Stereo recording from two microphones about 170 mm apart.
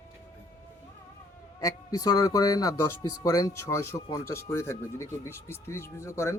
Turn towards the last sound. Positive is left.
turn(degrees=15)  # may be behind; listen again after turning